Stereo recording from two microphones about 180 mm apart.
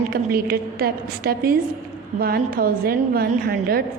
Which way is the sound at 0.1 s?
55° right (ahead or behind).